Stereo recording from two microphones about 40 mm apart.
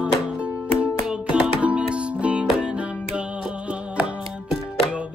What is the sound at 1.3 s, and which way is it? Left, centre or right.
Music, right.